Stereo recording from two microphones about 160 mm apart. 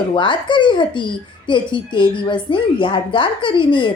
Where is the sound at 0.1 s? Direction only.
30° left (ahead or behind).